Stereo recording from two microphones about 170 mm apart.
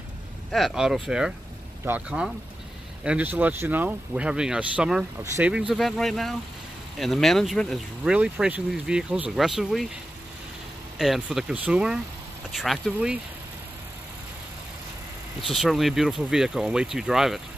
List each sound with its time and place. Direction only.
0.5 s speech: centre (ahead or behind)
5.2 s speech: 15° right (ahead or behind)
5.5 s speech: 5° right (ahead or behind)
11.0 s speech: 5° right (ahead or behind)
15.4 s speech: centre (ahead or behind)